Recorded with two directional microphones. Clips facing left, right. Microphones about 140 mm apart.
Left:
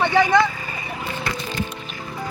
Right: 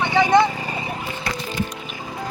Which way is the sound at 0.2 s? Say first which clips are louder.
Right 2 dB; 20° right (ahead or behind).